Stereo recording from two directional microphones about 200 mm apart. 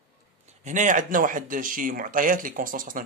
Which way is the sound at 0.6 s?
40° right (ahead or behind).